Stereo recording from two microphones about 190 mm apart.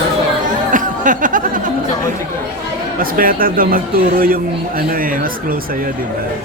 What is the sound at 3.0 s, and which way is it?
Speech, 50° right (ahead or behind).